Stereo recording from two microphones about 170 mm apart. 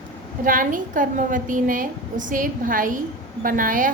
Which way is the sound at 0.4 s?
55° right (ahead or behind).